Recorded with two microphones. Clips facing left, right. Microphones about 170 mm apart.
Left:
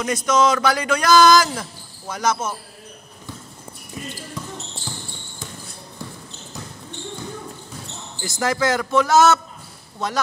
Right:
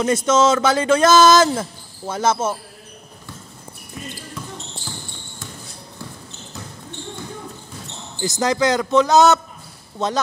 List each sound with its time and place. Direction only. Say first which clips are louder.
0.0 s speech: right 2 dB; 25° right (ahead or behind)
8.2 s speech: right 3 dB; 20° right (ahead or behind)